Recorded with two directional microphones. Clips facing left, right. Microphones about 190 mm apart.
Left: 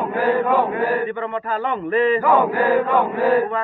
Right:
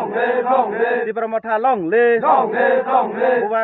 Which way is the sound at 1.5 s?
70° right (ahead or behind).